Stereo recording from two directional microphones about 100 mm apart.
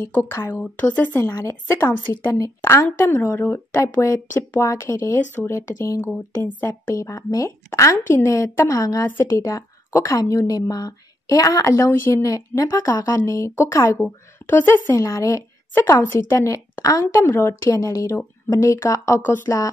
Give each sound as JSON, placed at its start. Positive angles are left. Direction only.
{"t": 0.0, "sound": "a woman's voice", "side_deg": 25}
{"t": 7.0, "sound": "a woman's voice", "side_deg": 35}
{"t": 9.0, "sound": "a woman's voice", "side_deg": 20}
{"t": 9.3, "sound": "a woman's voice", "side_deg": 30}